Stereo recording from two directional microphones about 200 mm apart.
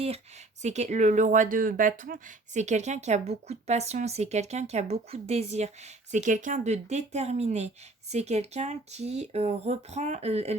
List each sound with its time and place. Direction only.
0.6 s speech: 35° right (ahead or behind)